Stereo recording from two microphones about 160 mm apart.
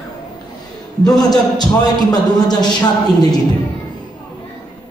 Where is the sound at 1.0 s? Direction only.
25° left (ahead or behind).